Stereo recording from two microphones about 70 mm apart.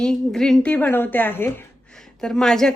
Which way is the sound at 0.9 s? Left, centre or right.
Left.